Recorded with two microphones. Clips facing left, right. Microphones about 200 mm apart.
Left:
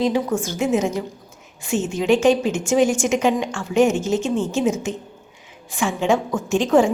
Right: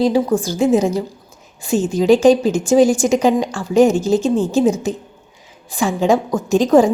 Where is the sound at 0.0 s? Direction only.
35° right (ahead or behind).